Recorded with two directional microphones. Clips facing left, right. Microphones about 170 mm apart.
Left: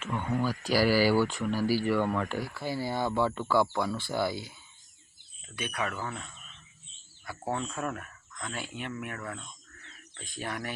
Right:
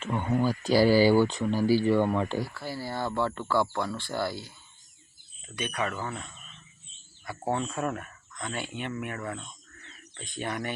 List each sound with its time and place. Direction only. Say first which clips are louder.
0.0 s speech: right 3 dB; 25° right (ahead or behind)
2.6 s speech: left 2 dB; 20° left (ahead or behind)
5.5 s speech: right 2 dB; 5° left (ahead or behind)